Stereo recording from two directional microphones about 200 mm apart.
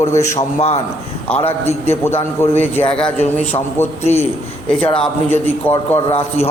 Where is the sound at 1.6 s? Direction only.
10° left (ahead or behind).